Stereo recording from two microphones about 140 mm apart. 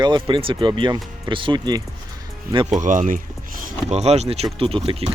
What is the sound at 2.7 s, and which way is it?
Speech, 65° right (ahead or behind).